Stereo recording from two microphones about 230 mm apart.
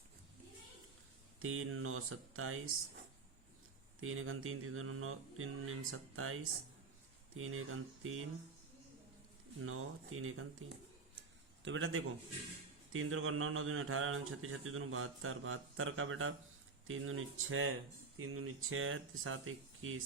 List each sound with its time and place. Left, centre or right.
1.4 s speech: right
4.0 s speech: right
9.6 s speech: right
11.6 s speech: right